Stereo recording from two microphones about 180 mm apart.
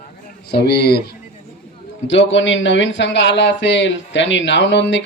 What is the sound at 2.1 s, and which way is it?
Speech, 90° left.